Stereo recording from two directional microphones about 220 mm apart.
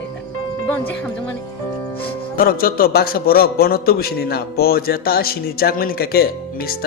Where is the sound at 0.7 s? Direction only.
10° left (ahead or behind).